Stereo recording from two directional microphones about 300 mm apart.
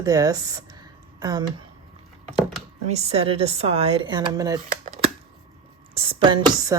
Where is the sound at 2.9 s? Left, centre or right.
Right.